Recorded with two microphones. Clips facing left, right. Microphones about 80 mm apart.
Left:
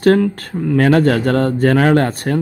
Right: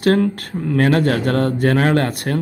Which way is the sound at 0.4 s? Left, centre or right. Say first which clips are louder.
Left 3 dB; left.